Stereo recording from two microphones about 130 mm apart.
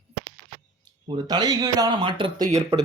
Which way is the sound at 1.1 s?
30° right (ahead or behind).